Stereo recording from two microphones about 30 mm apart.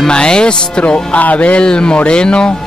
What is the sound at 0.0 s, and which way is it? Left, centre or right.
Speech, left.